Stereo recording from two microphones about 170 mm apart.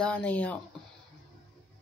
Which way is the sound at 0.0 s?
5° left (ahead or behind).